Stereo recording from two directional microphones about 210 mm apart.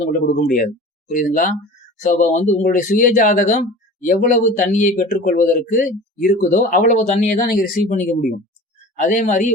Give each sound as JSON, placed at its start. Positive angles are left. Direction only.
{"t": 0.1, "sound": "speech", "side_deg": 40}